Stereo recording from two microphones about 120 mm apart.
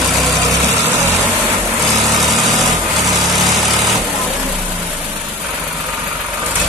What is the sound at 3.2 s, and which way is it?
Vehicle, centre (ahead or behind).